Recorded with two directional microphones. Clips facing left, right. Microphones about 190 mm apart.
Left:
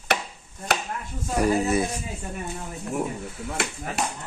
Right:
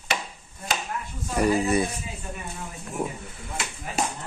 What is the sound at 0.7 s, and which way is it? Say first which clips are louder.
Chop: left 3 dB; 60° left (ahead or behind).